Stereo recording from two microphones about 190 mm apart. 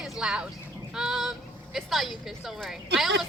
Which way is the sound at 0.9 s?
5° right (ahead or behind).